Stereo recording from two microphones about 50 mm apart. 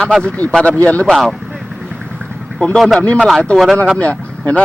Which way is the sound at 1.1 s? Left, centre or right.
Centre.